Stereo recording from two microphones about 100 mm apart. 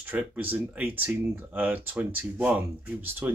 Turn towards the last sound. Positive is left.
turn(degrees=-15)  # may be behind; listen again after turning